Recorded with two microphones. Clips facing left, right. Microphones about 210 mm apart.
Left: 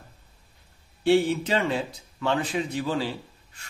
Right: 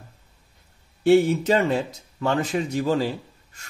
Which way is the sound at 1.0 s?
45° right (ahead or behind).